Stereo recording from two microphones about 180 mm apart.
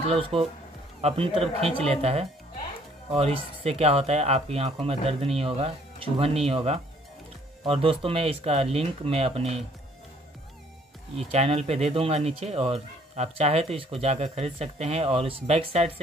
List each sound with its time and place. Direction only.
0.1 s speech: 30° right (ahead or behind)
11.1 s speech: 35° right (ahead or behind)